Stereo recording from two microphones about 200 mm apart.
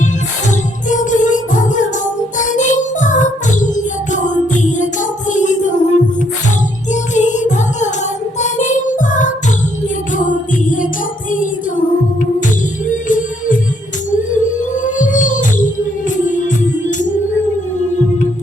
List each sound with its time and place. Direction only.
0.9 s music: 40° left (ahead or behind)
12.9 s music: 40° left (ahead or behind)